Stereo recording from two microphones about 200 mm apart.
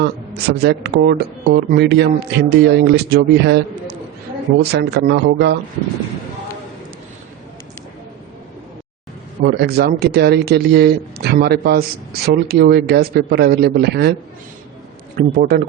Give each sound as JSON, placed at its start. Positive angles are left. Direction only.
{"t": 0.0, "sound": "speech", "side_deg": -55}
{"t": 4.6, "sound": "speech", "side_deg": -55}
{"t": 9.4, "sound": "speech", "side_deg": -50}
{"t": 15.4, "sound": "speech", "side_deg": -50}